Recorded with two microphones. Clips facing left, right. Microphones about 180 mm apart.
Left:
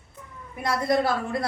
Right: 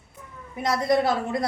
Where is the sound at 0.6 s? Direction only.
20° right (ahead or behind).